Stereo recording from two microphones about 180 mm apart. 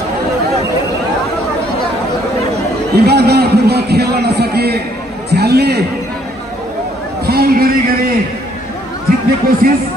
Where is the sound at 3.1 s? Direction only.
65° right (ahead or behind).